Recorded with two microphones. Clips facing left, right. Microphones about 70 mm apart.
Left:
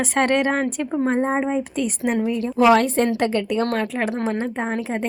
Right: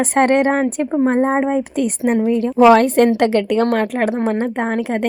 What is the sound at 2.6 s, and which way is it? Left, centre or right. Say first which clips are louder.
Speech: right 5 dB; right.